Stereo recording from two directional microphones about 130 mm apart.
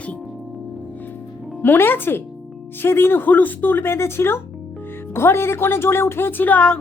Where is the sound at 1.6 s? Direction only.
15° left (ahead or behind).